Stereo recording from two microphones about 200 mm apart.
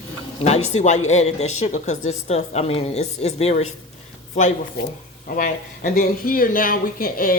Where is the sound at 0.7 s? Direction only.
35° left (ahead or behind).